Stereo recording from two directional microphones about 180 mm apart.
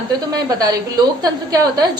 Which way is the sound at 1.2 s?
20° right (ahead or behind).